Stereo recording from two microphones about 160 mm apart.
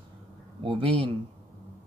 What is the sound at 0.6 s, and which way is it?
Speech, 35° right (ahead or behind).